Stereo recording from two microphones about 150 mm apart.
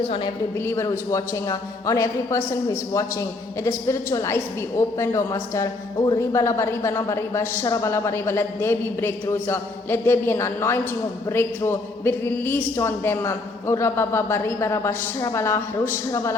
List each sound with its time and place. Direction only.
0.6 s a man's voice: 20° left (ahead or behind)